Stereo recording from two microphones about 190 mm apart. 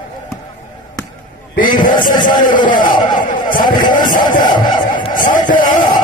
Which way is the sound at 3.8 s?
25° left (ahead or behind).